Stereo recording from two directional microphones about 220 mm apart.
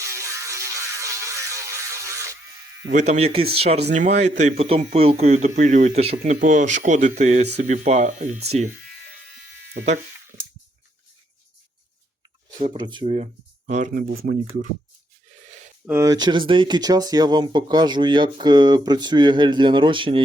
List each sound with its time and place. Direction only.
0.0 s a sound: 15° right (ahead or behind)
2.9 s speech: 30° right (ahead or behind)
9.8 s speech: 40° right (ahead or behind)
12.5 s speech: 20° right (ahead or behind); by 14.2 s 40° right (ahead or behind)
15.9 s speech: 15° right (ahead or behind)